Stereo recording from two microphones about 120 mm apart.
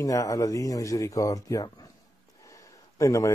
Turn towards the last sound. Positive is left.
turn(degrees=25)  # may be behind; listen again after turning